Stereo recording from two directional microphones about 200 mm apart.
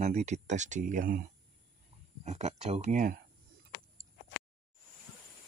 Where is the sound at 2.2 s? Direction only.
35° right (ahead or behind).